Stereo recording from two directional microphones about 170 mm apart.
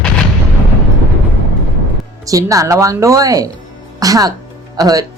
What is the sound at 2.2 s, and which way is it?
Speech, 20° right (ahead or behind).